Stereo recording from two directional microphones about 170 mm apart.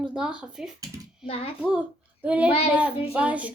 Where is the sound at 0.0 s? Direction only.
5° right (ahead or behind).